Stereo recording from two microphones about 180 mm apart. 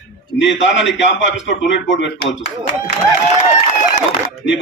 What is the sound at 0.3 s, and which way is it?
A man's voice, 90° left.